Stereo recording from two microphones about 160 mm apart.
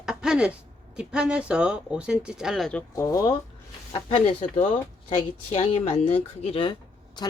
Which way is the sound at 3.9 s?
35° left (ahead or behind).